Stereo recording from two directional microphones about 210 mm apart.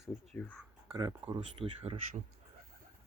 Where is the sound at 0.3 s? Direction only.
5° left (ahead or behind).